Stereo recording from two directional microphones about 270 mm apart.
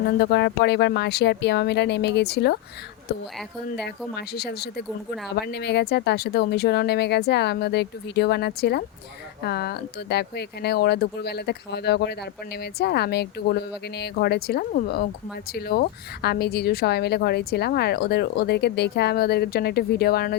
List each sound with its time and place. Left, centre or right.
0.0 s a woman's voice: left
4.1 s a woman's voice: left